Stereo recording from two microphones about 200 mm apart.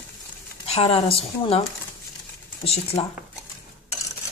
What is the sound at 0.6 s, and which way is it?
Speech, 30° left (ahead or behind).